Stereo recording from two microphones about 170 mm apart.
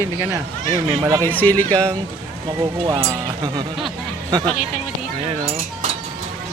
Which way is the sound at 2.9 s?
15° right (ahead or behind).